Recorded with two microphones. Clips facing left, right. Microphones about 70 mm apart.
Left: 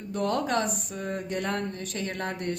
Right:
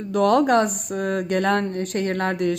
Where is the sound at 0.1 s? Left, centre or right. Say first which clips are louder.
Right 10 dB; right.